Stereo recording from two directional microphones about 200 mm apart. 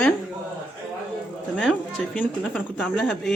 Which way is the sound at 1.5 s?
5° left (ahead or behind).